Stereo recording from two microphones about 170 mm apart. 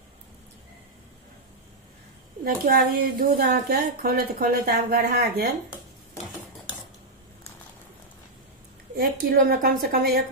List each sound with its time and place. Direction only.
2.4 s a woman's voice: 60° right (ahead or behind)
9.2 s a woman's voice: 60° right (ahead or behind)